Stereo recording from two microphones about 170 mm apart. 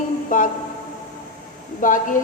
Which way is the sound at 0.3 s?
50° left (ahead or behind).